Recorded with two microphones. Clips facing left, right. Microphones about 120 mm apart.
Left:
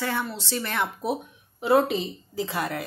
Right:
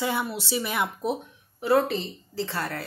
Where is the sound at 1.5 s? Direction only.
20° left (ahead or behind).